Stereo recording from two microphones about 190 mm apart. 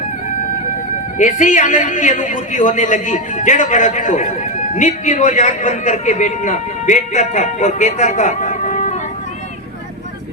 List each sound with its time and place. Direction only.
1.2 s a man's voice: 40° left (ahead or behind)